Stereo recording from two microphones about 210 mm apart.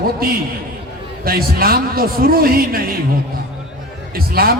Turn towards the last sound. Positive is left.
turn(degrees=-45)  # may be behind; listen again after turning